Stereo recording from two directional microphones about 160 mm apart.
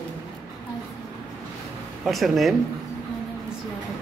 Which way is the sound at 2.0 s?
Centre (ahead or behind).